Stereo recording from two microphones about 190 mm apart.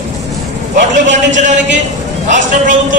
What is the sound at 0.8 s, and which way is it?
A man's voice, 40° right (ahead or behind).